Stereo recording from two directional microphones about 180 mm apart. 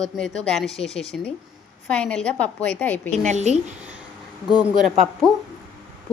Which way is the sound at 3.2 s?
40° right (ahead or behind).